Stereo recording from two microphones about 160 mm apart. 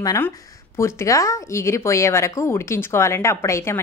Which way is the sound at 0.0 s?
20° left (ahead or behind).